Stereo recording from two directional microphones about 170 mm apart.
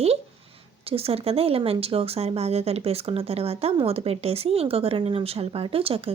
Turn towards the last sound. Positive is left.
turn(degrees=-35)  # may be behind; listen again after turning